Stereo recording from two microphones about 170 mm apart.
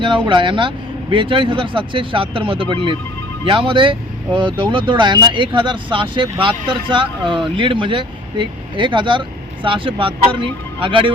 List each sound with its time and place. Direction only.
0.0 s speech: 30° right (ahead or behind)